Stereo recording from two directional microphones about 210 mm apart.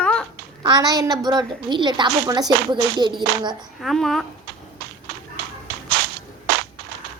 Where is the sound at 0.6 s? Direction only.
20° right (ahead or behind).